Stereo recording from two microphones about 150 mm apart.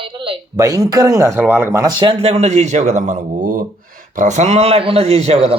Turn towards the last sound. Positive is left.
turn(degrees=-45)  # may be behind; listen again after turning